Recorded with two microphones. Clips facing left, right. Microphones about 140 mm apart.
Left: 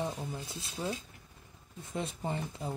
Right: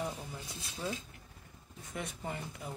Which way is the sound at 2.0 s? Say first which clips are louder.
Left 5 dB; 30° left (ahead or behind).